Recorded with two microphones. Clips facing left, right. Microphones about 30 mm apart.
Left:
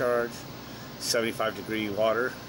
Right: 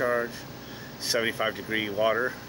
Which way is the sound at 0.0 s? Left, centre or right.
Centre.